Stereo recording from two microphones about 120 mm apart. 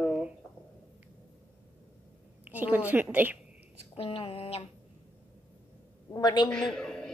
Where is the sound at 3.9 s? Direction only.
50° left (ahead or behind).